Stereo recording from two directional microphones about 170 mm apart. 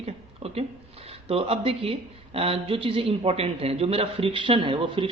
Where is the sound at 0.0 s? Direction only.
35° right (ahead or behind).